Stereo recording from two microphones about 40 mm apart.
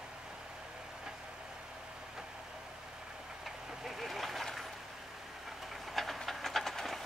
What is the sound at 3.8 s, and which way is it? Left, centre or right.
Vehicle, centre.